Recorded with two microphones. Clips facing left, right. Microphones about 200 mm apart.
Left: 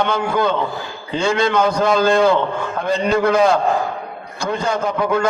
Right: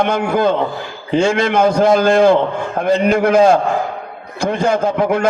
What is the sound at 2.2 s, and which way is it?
Speech, 35° right (ahead or behind).